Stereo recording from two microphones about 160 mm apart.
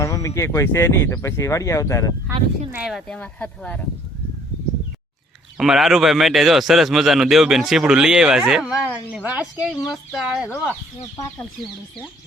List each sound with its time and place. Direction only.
0.0 s speech: 20° left (ahead or behind)
2.7 s a man's voice: centre (ahead or behind)
5.5 s a man's voice: 5° right (ahead or behind)